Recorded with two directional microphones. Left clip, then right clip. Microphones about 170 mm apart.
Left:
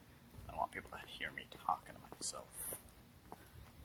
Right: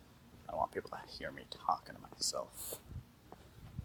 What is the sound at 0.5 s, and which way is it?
Speech, 40° right (ahead or behind).